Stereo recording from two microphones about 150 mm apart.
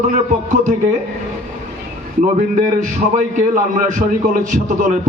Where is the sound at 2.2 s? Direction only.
60° right (ahead or behind).